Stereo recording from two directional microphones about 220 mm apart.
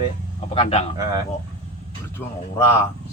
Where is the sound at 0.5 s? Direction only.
25° left (ahead or behind).